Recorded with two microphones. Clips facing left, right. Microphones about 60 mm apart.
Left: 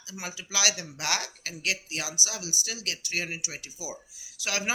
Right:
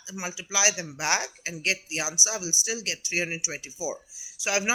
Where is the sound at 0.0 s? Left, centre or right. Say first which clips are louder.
Right 3 dB; right.